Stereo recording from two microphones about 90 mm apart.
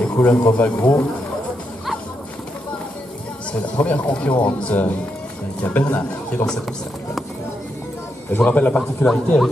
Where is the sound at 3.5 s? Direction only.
15° left (ahead or behind).